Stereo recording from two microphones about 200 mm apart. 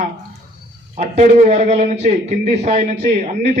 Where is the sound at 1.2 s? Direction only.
35° right (ahead or behind).